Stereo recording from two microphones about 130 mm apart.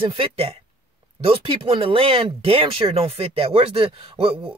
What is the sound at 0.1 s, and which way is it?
Speech, 45° right (ahead or behind).